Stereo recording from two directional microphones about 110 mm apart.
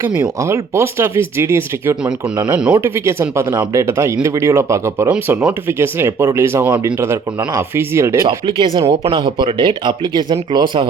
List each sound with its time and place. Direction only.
0.3 s speech: 25° right (ahead or behind)
2.0 s speech: 40° right (ahead or behind)
2.5 s speech: 10° right (ahead or behind)
2.7 s speech: 25° right (ahead or behind)
8.4 s speech: 50° right (ahead or behind)